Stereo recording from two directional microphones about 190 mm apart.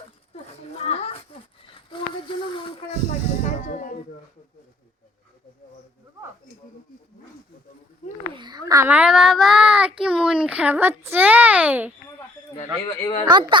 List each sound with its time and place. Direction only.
0.9 s a sound: 35° left (ahead or behind)
3.7 s speech: 40° left (ahead or behind)
8.4 s a child's voice: 20° right (ahead or behind)
13.0 s a woman's voice: 20° left (ahead or behind)
13.2 s speech: 25° right (ahead or behind)